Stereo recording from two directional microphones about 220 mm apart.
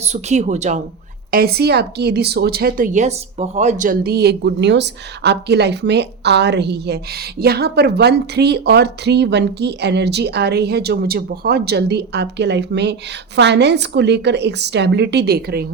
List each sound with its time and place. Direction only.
0.0 s speech: 30° right (ahead or behind)
1.3 s a woman's voice: 45° right (ahead or behind)